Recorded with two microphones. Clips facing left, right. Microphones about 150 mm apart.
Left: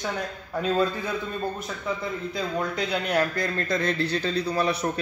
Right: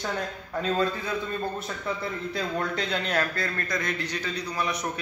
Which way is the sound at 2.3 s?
5° left (ahead or behind).